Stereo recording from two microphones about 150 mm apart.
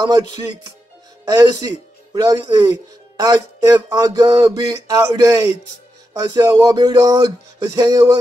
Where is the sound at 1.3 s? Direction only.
25° right (ahead or behind).